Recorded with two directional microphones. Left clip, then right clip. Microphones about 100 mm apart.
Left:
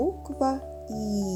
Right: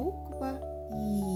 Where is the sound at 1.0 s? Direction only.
35° left (ahead or behind).